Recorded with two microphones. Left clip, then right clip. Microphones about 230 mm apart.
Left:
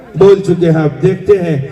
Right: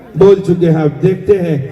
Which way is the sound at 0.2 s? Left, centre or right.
Left.